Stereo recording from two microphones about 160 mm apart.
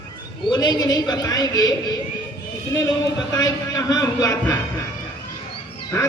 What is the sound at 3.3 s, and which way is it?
A man's voice, 25° left (ahead or behind).